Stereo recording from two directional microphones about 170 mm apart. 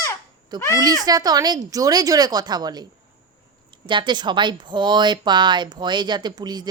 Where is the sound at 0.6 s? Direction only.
20° left (ahead or behind).